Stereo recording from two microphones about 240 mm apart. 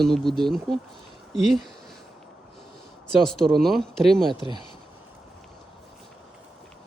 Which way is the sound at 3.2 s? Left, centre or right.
Centre.